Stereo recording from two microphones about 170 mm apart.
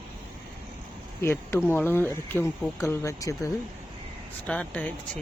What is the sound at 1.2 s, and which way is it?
Speech, 15° left (ahead or behind).